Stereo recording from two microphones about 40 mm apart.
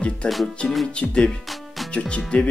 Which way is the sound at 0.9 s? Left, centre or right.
Left.